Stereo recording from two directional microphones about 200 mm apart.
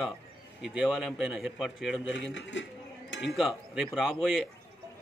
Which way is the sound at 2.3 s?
65° left (ahead or behind).